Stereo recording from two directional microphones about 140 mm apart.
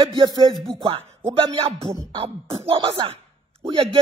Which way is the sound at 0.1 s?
30° right (ahead or behind).